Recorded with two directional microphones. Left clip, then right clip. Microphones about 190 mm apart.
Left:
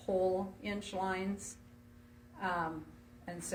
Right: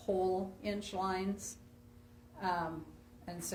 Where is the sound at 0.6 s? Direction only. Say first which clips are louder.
Even; 30° right (ahead or behind).